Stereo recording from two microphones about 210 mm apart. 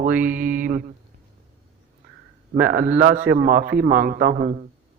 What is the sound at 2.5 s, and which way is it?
A man's voice, 45° right (ahead or behind).